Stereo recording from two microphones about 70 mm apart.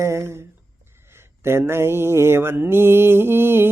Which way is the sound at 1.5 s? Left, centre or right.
Right.